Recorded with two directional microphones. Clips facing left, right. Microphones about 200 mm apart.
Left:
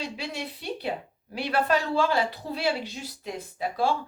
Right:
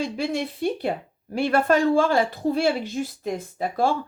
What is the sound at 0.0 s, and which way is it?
Speech, 50° right (ahead or behind).